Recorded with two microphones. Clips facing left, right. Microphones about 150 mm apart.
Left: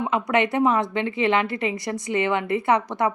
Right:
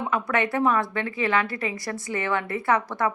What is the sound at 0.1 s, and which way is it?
A woman's voice, 20° left (ahead or behind).